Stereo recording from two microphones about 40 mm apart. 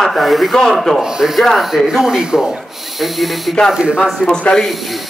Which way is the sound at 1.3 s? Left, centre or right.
Centre.